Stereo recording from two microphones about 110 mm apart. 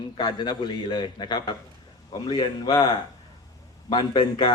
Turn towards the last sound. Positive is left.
turn(degrees=45)  # may be behind; listen again after turning